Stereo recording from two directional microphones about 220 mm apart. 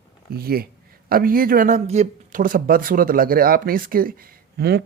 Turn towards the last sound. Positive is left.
turn(degrees=-45)  # may be behind; listen again after turning